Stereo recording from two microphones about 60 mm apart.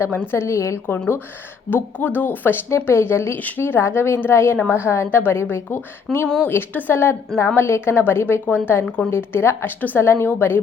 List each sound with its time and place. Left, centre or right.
0.1 s a woman's voice: left
1.7 s a woman's voice: left
2.6 s a woman's voice: left
9.6 s a woman's voice: left
10.0 s a woman's voice: left